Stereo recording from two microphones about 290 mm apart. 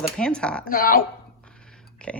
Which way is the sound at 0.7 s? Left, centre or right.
Left.